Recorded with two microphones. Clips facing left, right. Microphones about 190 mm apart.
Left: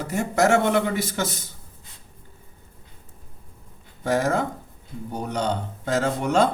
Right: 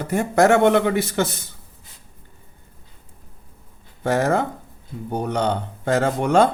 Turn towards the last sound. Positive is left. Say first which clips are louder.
# right 4 dB
turn(degrees=-55)  # may be behind; listen again after turning